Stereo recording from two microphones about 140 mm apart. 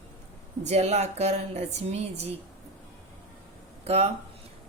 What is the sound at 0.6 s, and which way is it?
A woman's voice, 50° right (ahead or behind).